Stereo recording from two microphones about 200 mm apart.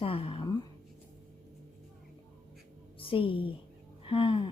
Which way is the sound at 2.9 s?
25° left (ahead or behind).